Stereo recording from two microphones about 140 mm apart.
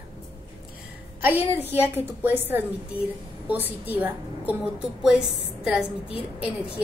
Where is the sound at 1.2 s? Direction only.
15° right (ahead or behind).